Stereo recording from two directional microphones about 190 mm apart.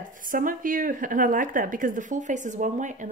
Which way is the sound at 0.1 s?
45° right (ahead or behind).